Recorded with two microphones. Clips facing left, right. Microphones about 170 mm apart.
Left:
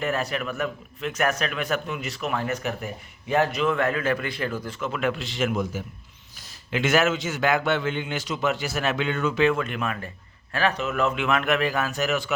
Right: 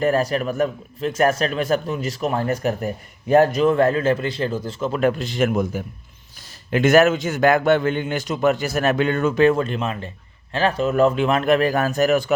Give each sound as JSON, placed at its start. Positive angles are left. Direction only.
{"t": 0.0, "sound": "a man's voice", "side_deg": -40}